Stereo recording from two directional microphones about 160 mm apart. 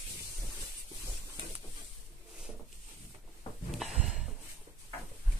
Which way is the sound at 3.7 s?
Centre (ahead or behind).